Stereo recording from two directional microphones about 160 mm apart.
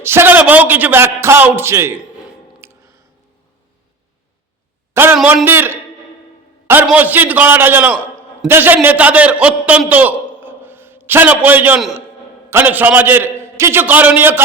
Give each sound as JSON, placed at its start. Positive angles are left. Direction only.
{"t": 0.0, "sound": "a man's voice", "side_deg": -15}
{"t": 2.2, "sound": "a sound", "side_deg": -15}
{"t": 5.1, "sound": "a man's voice", "side_deg": -5}
{"t": 6.8, "sound": "a man's voice", "side_deg": -10}